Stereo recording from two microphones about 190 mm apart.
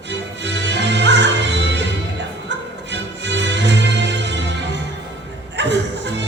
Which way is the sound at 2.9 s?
70° right (ahead or behind).